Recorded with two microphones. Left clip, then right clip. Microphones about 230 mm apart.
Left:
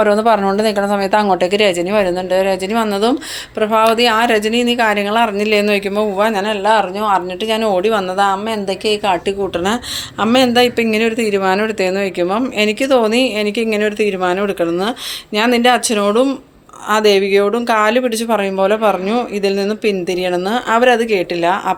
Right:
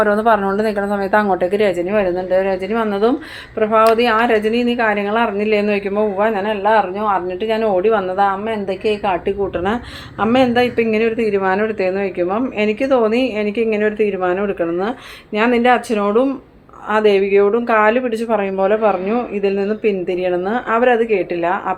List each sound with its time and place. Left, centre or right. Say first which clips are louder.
0.0 s speech: left 2 dB; left